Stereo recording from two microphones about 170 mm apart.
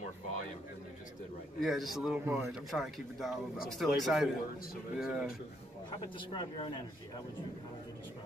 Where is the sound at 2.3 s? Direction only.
15° right (ahead or behind).